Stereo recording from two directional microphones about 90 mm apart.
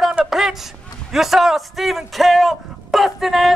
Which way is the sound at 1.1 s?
5° right (ahead or behind).